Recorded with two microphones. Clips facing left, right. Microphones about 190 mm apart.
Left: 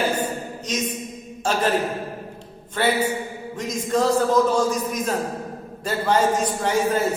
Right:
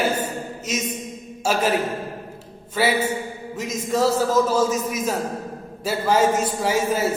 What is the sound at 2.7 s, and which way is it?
A man's voice, 5° right (ahead or behind).